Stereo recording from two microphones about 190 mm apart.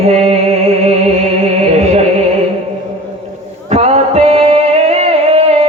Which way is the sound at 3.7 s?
35° right (ahead or behind).